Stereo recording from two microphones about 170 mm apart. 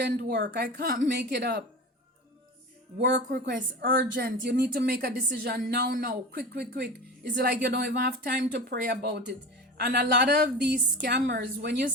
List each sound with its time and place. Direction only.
0.2 s speech: 85° right
3.0 s speech: 80° right
7.3 s a woman's voice: 80° right